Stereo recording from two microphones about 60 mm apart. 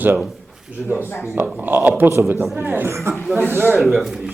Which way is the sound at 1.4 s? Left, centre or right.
Right.